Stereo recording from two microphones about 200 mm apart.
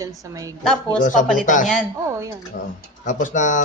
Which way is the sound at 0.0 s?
15° right (ahead or behind).